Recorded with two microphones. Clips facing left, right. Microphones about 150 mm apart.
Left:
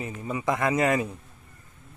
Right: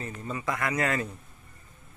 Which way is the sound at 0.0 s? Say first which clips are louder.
Left 4 dB; 15° left (ahead or behind).